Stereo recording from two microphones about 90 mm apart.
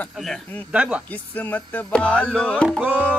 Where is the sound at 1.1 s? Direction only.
20° left (ahead or behind).